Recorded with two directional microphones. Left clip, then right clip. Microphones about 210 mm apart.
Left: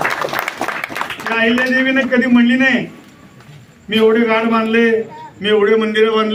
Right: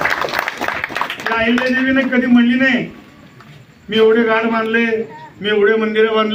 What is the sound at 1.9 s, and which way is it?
Speech, 5° left (ahead or behind).